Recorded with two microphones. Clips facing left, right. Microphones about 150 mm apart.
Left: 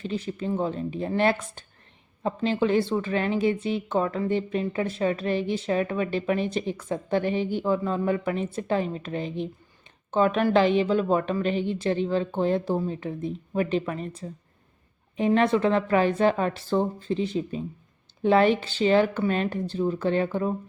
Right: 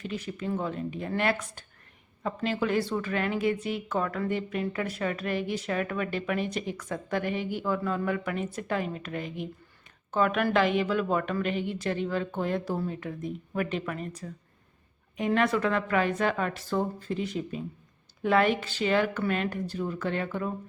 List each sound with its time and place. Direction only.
0.0 s a woman's voice: 30° left (ahead or behind)
15.4 s a woman's voice: 25° left (ahead or behind)